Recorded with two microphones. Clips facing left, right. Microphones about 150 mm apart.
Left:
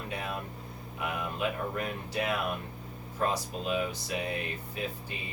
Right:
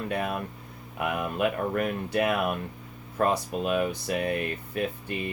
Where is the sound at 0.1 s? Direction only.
60° right (ahead or behind).